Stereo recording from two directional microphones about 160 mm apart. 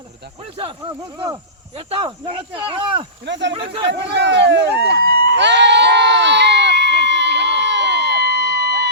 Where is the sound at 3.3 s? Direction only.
90° right.